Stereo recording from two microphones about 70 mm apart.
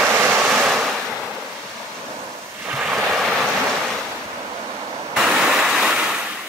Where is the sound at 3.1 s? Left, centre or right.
Centre.